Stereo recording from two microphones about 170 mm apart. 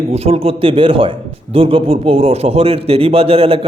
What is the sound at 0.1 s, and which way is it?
A man's voice, 35° right (ahead or behind).